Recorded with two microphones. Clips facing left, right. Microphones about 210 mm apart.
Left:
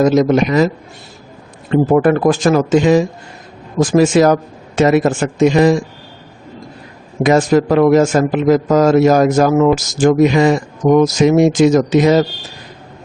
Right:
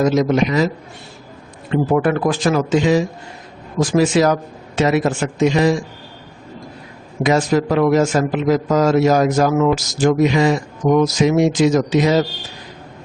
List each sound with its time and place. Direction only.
0.0 s a man's voice: 50° left (ahead or behind)
1.7 s a man's voice: 45° left (ahead or behind)
7.2 s a man's voice: 50° left (ahead or behind)